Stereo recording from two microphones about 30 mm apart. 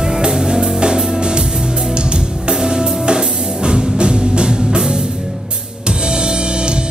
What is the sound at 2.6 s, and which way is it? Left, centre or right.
Music, right.